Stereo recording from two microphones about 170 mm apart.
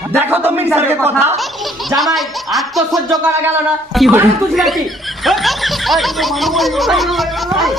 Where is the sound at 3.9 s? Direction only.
Centre (ahead or behind).